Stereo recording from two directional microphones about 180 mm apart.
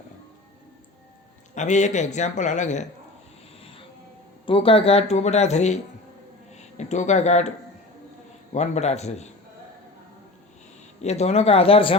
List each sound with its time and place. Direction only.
1.5 s speech: 40° left (ahead or behind)
4.4 s speech: 30° left (ahead or behind)
8.5 s speech: 40° left (ahead or behind)
11.0 s speech: 40° left (ahead or behind)